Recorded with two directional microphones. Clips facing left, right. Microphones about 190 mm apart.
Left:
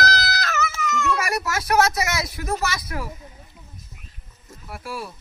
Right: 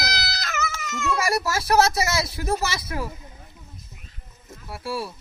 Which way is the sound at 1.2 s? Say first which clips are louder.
Right 2 dB; 30° right (ahead or behind).